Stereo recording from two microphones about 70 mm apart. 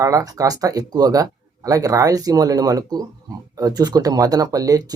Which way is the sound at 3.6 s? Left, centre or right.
Right.